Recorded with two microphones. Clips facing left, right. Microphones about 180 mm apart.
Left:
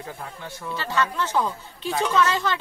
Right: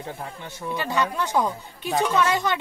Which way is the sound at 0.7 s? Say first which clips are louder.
Right 1 dB; 15° right (ahead or behind).